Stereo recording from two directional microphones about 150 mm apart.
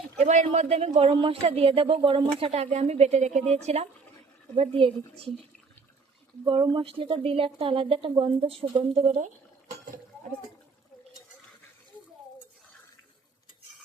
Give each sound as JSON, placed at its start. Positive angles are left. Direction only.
{"t": 0.2, "sound": "speech", "side_deg": -50}
{"t": 6.4, "sound": "speech", "side_deg": -35}